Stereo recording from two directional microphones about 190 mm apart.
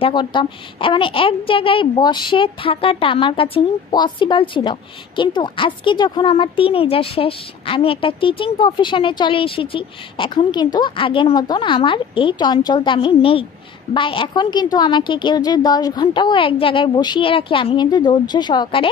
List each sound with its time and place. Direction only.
0.0 s a woman's voice: 25° left (ahead or behind)